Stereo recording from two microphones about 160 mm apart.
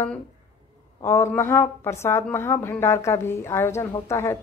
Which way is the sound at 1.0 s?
15° left (ahead or behind).